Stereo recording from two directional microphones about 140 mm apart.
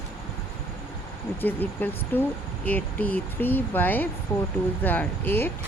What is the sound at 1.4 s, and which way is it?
Speech, 15° left (ahead or behind).